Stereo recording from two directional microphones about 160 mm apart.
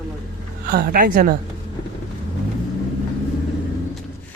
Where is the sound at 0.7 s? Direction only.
70° right (ahead or behind).